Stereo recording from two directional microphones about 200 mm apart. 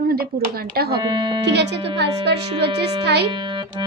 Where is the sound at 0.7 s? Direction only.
50° right (ahead or behind).